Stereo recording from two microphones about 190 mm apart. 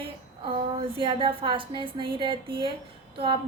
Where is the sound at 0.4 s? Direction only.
25° right (ahead or behind).